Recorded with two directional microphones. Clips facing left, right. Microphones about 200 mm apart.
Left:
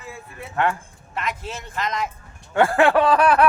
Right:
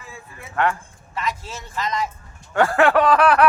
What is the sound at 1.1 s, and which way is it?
Speech, 55° left (ahead or behind).